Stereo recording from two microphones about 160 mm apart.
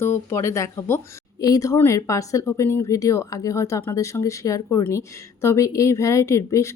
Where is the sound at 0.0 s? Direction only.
15° left (ahead or behind).